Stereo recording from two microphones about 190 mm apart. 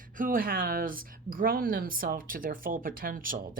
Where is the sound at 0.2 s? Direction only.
45° right (ahead or behind).